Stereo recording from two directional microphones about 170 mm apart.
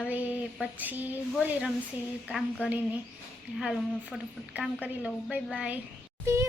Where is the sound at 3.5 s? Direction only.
Centre (ahead or behind).